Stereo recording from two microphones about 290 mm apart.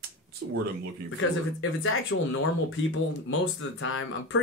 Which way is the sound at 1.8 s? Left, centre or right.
Left.